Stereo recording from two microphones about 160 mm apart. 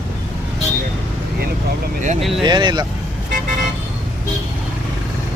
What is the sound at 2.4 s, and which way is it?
Speech, 30° right (ahead or behind).